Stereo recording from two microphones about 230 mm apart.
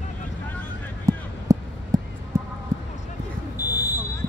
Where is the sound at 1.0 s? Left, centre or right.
Centre.